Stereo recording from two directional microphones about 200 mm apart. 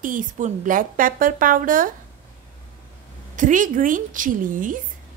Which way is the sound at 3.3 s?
40° right (ahead or behind).